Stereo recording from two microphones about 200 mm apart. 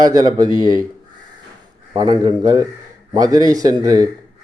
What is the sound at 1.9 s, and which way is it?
A man's voice, 20° right (ahead or behind).